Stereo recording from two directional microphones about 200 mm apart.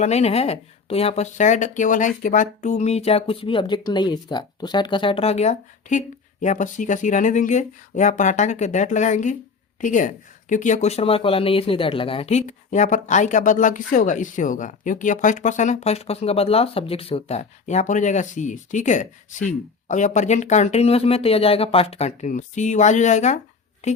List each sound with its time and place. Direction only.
0.0 s speech: 35° left (ahead or behind)